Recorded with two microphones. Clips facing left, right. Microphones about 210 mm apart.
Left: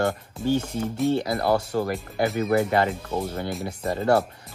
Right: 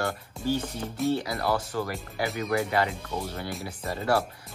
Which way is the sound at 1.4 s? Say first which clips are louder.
Left 5 dB; 45° left (ahead or behind).